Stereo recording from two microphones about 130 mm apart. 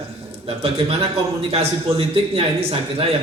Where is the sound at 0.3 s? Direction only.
50° right (ahead or behind).